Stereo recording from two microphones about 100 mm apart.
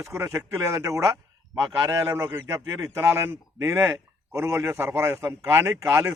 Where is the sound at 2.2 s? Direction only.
25° right (ahead or behind).